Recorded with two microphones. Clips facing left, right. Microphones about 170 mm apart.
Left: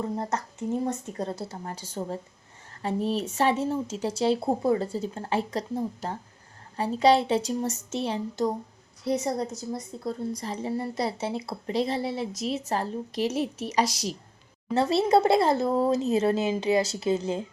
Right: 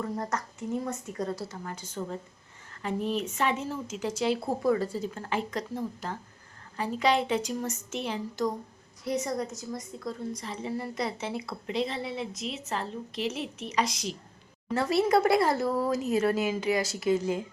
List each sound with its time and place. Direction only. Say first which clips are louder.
0.0 s a woman's voice: left 2 dB; 25° left (ahead or behind)
14.7 s speech: left 3 dB; 25° left (ahead or behind)